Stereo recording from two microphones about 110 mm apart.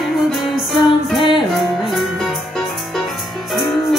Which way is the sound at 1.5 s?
Centre (ahead or behind).